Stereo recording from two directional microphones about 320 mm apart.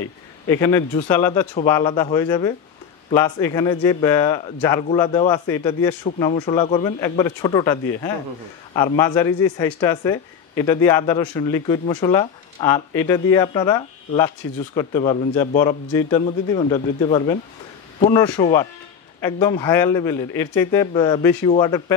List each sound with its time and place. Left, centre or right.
0.5 s a man's voice: centre